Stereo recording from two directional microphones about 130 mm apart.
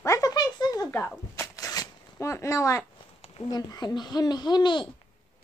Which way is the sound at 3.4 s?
30° left (ahead or behind).